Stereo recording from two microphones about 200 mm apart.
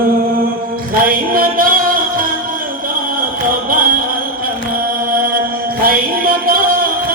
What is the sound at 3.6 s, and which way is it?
Chant, 45° right (ahead or behind).